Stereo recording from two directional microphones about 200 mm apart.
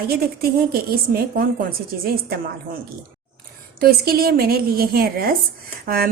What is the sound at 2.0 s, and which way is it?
Speech, 50° right (ahead or behind).